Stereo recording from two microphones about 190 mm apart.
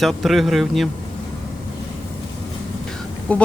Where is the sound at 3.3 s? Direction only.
5° left (ahead or behind).